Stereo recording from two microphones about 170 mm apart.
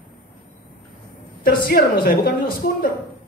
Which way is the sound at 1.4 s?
60° left (ahead or behind).